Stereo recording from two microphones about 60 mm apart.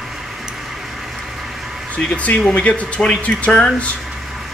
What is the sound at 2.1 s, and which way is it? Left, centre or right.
Speech, left.